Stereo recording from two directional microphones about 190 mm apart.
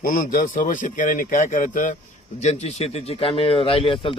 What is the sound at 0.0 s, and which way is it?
Speech, 50° left (ahead or behind).